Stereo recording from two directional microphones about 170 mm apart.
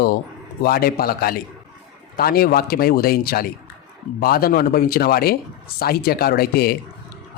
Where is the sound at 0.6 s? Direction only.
60° left (ahead or behind).